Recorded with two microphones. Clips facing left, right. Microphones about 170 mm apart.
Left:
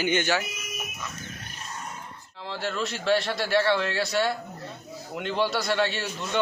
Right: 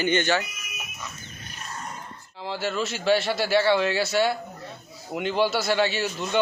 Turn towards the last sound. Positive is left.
turn(degrees=0)  # may be behind; listen again after turning